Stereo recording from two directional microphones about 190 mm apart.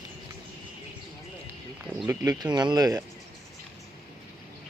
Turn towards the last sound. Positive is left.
turn(degrees=-20)  # may be behind; listen again after turning